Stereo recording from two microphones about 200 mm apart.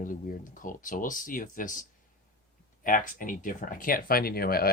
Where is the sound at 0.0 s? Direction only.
40° left (ahead or behind).